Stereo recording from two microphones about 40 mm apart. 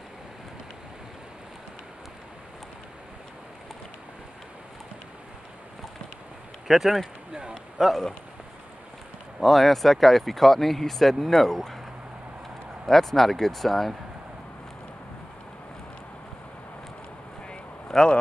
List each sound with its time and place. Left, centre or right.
6.7 s speech: centre
9.4 s speech: centre
12.8 s speech: centre
17.8 s speech: left